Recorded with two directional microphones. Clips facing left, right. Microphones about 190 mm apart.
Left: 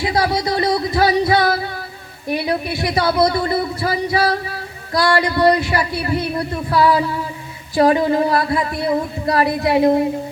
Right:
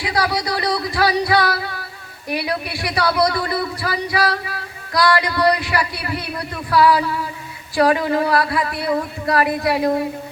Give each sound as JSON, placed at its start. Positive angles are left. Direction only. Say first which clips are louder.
{"t": 0.0, "sound": "music", "louder": "left 3 dB", "side_deg": 25}
{"t": 2.3, "sound": "speech", "louder": "left 3 dB", "side_deg": 25}